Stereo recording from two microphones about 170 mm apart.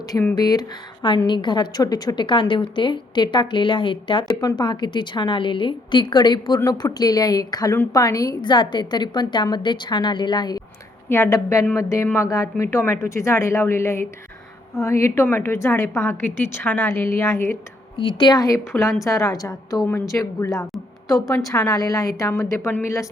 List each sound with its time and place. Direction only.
0.1 s speech: 10° left (ahead or behind)
0.3 s a woman's voice: 20° left (ahead or behind)
20.7 s a sound: centre (ahead or behind)
21.2 s speech: 20° left (ahead or behind)